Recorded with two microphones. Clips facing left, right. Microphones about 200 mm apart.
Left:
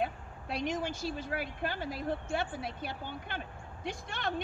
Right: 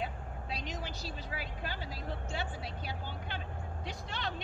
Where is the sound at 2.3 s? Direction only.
55° left (ahead or behind).